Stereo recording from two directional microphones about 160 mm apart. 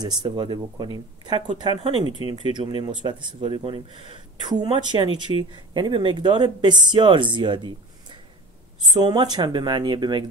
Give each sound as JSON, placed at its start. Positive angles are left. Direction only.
{"t": 0.0, "sound": "speech", "side_deg": -25}